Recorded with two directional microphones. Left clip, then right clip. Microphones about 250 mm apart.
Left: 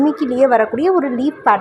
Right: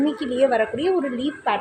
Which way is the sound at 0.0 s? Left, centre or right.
Centre.